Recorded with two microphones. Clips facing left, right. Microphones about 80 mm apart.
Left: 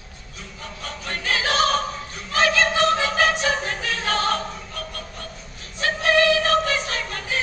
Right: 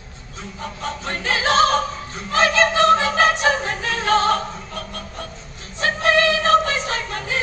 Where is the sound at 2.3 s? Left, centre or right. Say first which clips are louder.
Right 3 dB; right.